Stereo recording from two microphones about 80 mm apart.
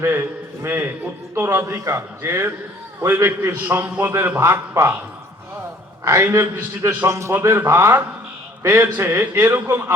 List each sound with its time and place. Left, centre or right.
0.0 s a man's voice: right
4.4 s a man's voice: right
6.1 s a man's voice: right
7.1 s a man's voice: right